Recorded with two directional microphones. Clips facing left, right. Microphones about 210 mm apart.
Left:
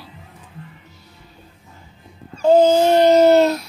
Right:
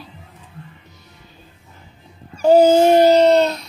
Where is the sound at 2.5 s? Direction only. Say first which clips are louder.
Right 2 dB; 15° right (ahead or behind).